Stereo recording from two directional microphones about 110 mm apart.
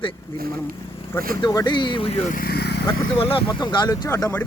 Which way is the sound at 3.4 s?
40° left (ahead or behind).